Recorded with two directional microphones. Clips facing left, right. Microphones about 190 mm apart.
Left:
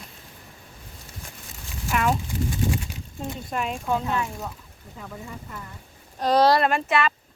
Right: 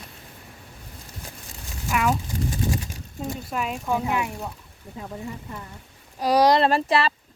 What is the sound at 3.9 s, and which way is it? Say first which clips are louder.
Speech: right 1 dB; 15° right (ahead or behind).